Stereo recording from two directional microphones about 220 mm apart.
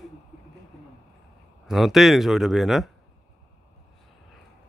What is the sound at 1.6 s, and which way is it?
Speech, centre (ahead or behind).